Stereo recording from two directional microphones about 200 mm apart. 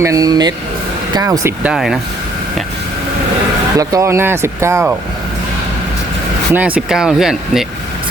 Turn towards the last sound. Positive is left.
turn(degrees=0)  # may be behind; listen again after turning